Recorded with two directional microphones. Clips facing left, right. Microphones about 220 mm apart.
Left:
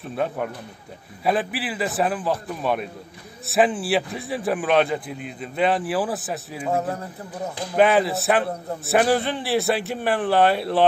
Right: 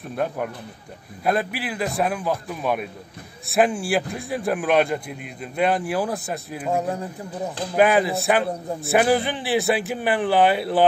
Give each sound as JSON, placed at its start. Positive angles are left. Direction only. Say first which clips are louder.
{"t": 0.1, "sound": "a man's voice", "louder": "even", "side_deg": 0}
{"t": 6.8, "sound": "a man's voice", "louder": "right 1 dB", "side_deg": -15}
{"t": 7.7, "sound": "a man's voice", "louder": "even", "side_deg": 0}